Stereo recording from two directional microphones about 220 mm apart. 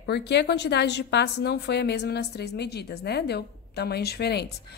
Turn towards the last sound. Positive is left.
turn(degrees=50)  # may be behind; listen again after turning